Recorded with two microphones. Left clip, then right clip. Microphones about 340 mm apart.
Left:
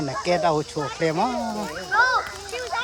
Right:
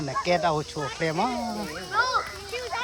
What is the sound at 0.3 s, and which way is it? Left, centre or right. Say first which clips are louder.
Speech: left 3 dB; centre.